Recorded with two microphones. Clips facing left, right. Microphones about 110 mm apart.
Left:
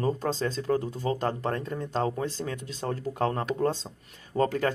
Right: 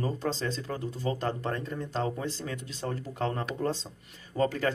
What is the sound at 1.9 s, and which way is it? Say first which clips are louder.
Speech: left 4 dB; 45° left (ahead or behind).